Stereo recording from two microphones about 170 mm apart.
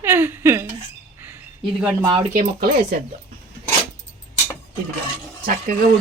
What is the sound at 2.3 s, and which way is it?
Speech, 60° right (ahead or behind).